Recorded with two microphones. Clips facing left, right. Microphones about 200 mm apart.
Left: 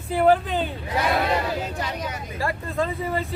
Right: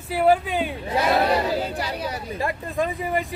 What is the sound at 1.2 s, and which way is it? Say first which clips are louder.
Speech: right 3 dB; 35° right (ahead or behind).